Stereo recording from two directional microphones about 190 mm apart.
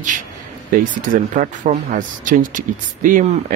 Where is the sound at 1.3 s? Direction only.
45° right (ahead or behind).